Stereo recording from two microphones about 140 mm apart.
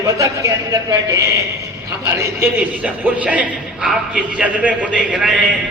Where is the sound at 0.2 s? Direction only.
25° right (ahead or behind).